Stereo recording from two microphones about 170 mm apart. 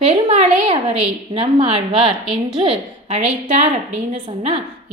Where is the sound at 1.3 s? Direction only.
35° right (ahead or behind).